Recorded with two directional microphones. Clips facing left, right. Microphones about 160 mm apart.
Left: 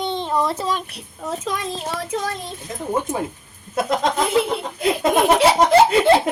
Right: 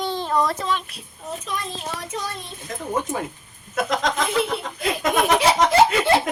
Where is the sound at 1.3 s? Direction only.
90° left.